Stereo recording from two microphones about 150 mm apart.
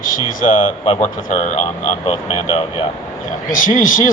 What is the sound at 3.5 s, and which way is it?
Speech, 60° left (ahead or behind).